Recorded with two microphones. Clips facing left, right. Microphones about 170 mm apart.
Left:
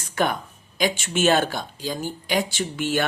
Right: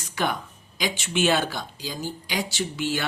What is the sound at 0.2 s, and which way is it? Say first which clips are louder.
Speech: left 3 dB; 50° left (ahead or behind).